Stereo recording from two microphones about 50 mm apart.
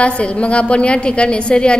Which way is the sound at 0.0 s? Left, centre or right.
Left.